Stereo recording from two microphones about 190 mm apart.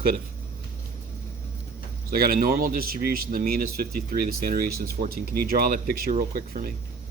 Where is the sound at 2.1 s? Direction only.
50° right (ahead or behind).